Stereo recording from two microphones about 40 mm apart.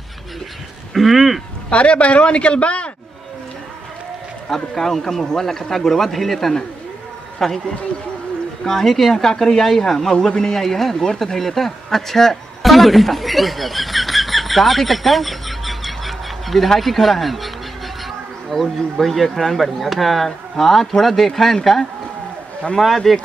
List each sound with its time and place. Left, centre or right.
0.9 s speech: centre
1.7 s speech: left
4.7 s a man's voice: centre
8.6 s a man's voice: centre
22.8 s speech: centre